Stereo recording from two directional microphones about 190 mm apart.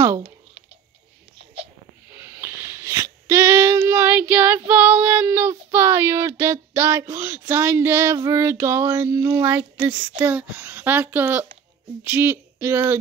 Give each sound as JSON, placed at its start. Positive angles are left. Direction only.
{"t": 0.0, "sound": "speech", "side_deg": -15}
{"t": 2.1, "sound": "child singing", "side_deg": -15}
{"t": 12.0, "sound": "a sound", "side_deg": -10}